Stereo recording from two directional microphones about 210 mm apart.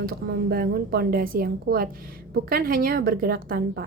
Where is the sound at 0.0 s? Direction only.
45° right (ahead or behind).